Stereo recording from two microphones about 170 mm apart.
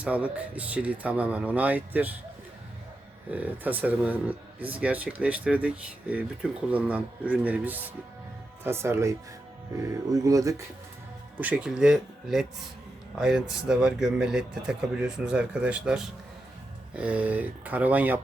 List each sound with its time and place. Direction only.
0.0 s speech: 10° right (ahead or behind)
3.3 s speech: 10° right (ahead or behind)
11.3 s speech: 10° right (ahead or behind)